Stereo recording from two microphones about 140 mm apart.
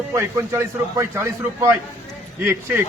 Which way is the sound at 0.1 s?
20° right (ahead or behind).